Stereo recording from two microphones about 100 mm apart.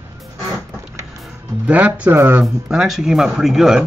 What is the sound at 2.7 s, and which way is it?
Speech, 5° right (ahead or behind).